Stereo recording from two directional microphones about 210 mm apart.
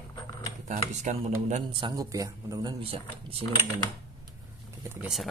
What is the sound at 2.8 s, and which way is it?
Speech, 25° right (ahead or behind).